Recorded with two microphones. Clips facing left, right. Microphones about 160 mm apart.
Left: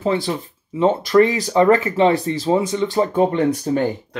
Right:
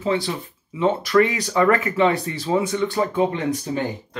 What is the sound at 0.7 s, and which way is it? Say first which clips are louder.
Speech: left 3 dB; 30° left (ahead or behind).